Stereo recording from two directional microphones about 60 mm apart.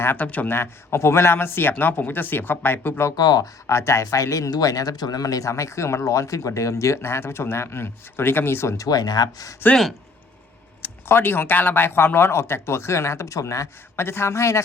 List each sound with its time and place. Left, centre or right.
0.0 s a man's voice: left
0.3 s speech: left
0.5 s a man's voice: left
3.1 s speech: left
3.7 s speech: left
8.8 s speech: left
11.1 s speech: left